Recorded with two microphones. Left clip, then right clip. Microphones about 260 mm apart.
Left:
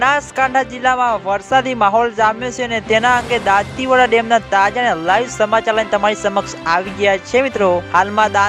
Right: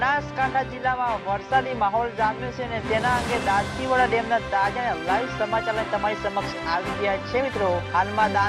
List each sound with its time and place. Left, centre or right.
0.0 s speech: left